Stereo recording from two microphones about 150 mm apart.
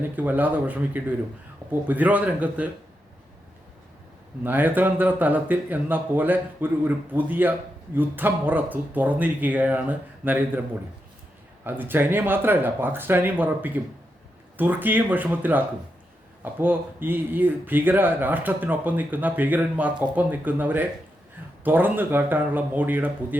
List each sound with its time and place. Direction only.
0.2 s speech: 10° right (ahead or behind)
4.4 s speech: 10° right (ahead or behind)
11.6 s speech: 15° right (ahead or behind)